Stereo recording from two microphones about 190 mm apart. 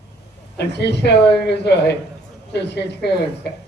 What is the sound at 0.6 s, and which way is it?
A woman's voice, 60° left (ahead or behind).